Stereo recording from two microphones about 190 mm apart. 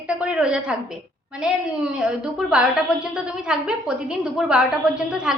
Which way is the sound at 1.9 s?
5° right (ahead or behind).